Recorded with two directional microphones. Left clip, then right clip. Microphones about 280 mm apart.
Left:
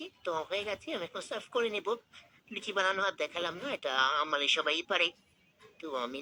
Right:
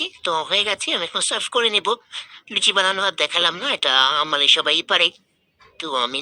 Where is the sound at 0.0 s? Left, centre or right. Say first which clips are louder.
Right 13 dB; right.